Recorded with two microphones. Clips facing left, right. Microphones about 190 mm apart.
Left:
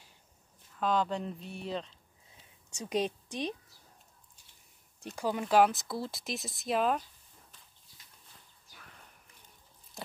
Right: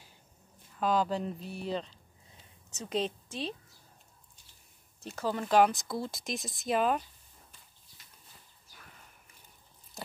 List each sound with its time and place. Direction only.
0.7 s speech: 5° right (ahead or behind)
2.7 s a woman's voice: 10° left (ahead or behind)
5.1 s speech: 10° left (ahead or behind)
10.0 s a sound: centre (ahead or behind)